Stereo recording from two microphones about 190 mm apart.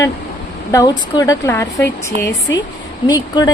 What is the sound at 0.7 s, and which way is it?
Speech, 15° left (ahead or behind).